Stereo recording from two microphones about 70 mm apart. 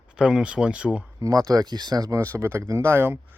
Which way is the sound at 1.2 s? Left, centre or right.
Right.